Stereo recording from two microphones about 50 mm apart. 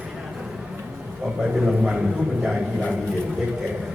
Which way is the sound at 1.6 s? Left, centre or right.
Centre.